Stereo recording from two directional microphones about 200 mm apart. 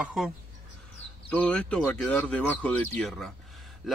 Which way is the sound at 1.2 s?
5° left (ahead or behind).